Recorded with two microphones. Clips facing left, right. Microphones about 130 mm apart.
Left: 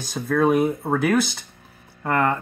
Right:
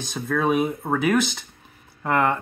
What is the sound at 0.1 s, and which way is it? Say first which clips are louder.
Speech: left 3 dB; 5° left (ahead or behind).